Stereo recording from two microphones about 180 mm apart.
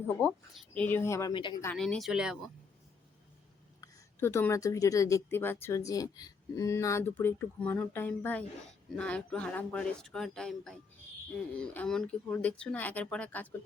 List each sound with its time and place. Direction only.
0.5 s a woman's voice: 10° left (ahead or behind)
1.3 s speech: 25° left (ahead or behind)
1.7 s speech: 5° left (ahead or behind)
3.8 s a woman's voice: 15° left (ahead or behind)